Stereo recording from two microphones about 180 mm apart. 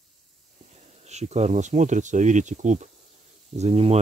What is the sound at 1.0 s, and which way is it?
Speech, 40° right (ahead or behind).